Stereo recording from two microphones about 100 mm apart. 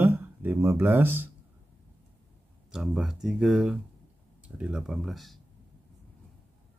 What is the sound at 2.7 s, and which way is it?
Speech, 5° right (ahead or behind).